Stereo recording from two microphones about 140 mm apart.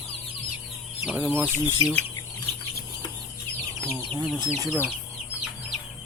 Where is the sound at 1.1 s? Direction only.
10° right (ahead or behind).